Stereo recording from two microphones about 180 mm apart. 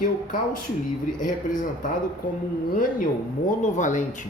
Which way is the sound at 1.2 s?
45° left (ahead or behind).